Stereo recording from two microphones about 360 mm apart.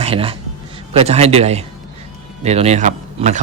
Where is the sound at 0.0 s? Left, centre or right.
Centre.